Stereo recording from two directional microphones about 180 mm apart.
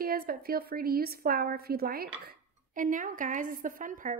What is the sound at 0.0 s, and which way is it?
A woman's voice, 55° right (ahead or behind).